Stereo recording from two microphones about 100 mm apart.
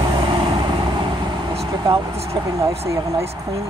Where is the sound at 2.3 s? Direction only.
35° right (ahead or behind).